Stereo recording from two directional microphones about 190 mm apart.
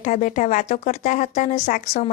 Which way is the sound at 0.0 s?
40° left (ahead or behind).